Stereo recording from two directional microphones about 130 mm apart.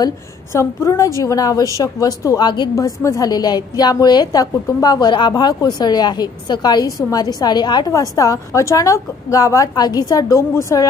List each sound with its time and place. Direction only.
0.0 s a woman's voice: 25° left (ahead or behind)
2.7 s a woman's voice: 25° left (ahead or behind)